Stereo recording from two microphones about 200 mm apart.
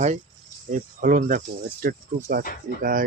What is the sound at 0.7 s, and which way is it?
Speech, 40° right (ahead or behind).